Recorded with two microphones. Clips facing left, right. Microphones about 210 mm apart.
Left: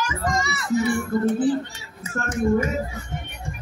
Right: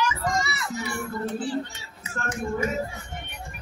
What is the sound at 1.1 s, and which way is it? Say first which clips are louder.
Speech: left 9 dB; 50° left (ahead or behind).